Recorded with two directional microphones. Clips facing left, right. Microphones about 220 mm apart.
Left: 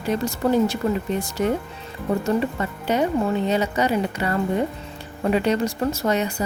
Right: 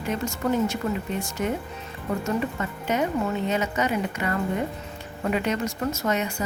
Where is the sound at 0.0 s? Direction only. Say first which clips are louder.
Left 4 dB; 35° left (ahead or behind).